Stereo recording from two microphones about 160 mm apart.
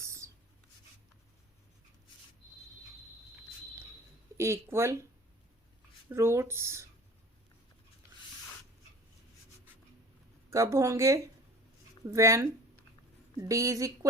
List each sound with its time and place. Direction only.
4.4 s speech: 15° right (ahead or behind)
6.1 s speech: 15° right (ahead or behind)
10.5 s speech: 20° right (ahead or behind)
13.5 s a woman's voice: 20° right (ahead or behind)